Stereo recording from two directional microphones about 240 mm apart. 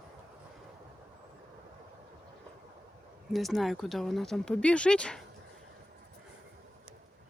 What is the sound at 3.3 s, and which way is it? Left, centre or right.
Speech, centre.